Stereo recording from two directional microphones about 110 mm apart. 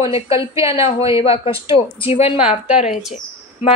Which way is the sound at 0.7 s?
60° left (ahead or behind).